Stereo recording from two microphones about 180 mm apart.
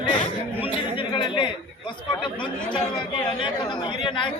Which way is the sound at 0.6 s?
30° left (ahead or behind).